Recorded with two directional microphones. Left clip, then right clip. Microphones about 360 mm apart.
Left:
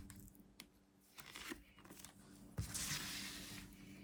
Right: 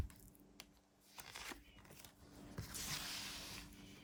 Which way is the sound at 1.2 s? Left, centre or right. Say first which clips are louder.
Even; centre.